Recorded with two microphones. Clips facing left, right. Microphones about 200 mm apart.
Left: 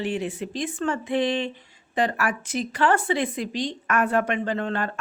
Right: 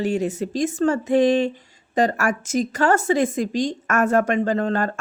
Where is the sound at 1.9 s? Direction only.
40° right (ahead or behind).